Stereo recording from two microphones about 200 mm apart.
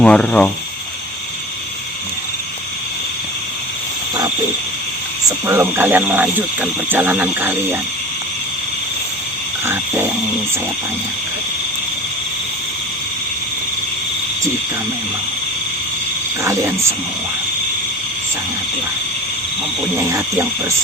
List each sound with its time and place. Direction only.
0.0 s speech: 5° left (ahead or behind)
5.5 s speech: 10° right (ahead or behind)
9.6 s speech: 10° right (ahead or behind)
16.4 s speech: 15° right (ahead or behind)
20.1 s speech: 15° right (ahead or behind)